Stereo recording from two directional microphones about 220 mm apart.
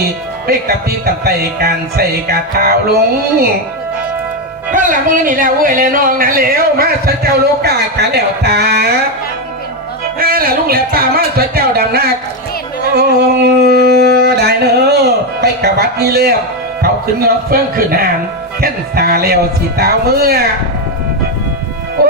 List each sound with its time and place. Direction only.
0.4 s music: 45° right (ahead or behind)
4.7 s speech: 35° right (ahead or behind)
7.6 s music: 45° right (ahead or behind)
10.2 s music: 40° right (ahead or behind)
12.9 s a sound: 45° right (ahead or behind)
16.8 s music: 45° right (ahead or behind)